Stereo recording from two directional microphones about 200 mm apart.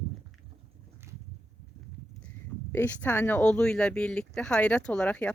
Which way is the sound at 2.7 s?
10° left (ahead or behind).